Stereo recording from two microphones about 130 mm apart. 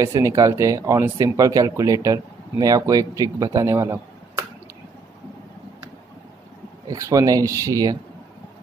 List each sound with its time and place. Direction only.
0.0 s speech: 25° right (ahead or behind)
6.9 s speech: 25° right (ahead or behind)